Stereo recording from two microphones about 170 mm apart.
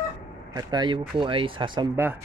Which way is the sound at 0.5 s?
25° right (ahead or behind).